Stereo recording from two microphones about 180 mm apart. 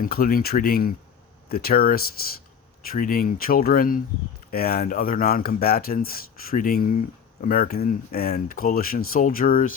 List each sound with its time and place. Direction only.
0.0 s speech: 55° left (ahead or behind)